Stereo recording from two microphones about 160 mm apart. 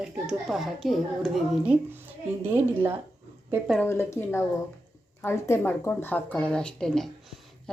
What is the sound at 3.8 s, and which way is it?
Speech, 15° left (ahead or behind).